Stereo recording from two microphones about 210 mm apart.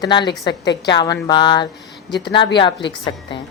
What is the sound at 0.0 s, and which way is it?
Speech, 20° left (ahead or behind).